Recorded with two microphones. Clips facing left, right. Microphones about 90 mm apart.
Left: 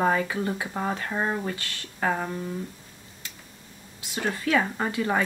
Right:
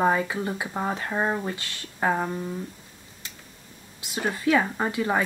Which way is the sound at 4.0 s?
20° right (ahead or behind).